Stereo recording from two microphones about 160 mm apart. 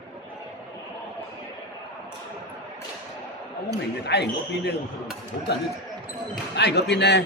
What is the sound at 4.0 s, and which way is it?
Speech, 90° left.